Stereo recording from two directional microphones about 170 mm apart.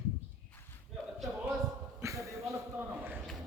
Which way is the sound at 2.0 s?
15° right (ahead or behind).